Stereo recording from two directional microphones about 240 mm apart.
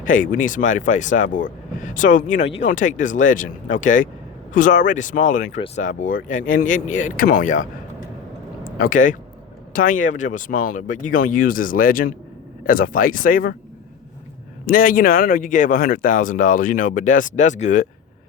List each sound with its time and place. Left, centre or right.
0.0 s speech: left
14.7 s speech: left